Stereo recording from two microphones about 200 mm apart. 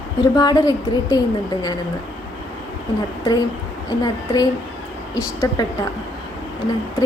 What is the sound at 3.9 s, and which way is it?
A woman's voice, 20° left (ahead or behind).